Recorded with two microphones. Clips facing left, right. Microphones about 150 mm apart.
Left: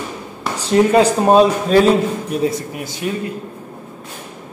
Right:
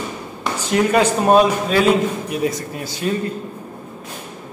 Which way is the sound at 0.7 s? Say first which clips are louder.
Left 4 dB; 25° left (ahead or behind).